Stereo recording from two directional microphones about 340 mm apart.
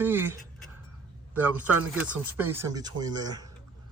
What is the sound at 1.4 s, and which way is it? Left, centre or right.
Speech, centre.